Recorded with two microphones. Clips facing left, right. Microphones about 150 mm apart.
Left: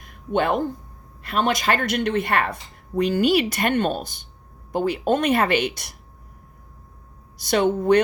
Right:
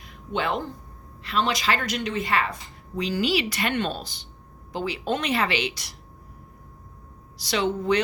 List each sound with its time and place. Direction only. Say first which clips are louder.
0.0 s a sound: left 6 dB; 50° left (ahead or behind)
1.2 s a woman's voice: left 3 dB; 50° left (ahead or behind)
7.3 s a woman's voice: left 5 dB; 50° left (ahead or behind)